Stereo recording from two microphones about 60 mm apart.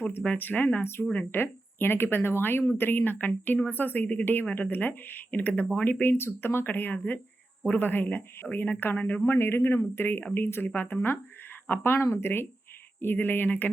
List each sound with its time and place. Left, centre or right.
0.3 s speech: left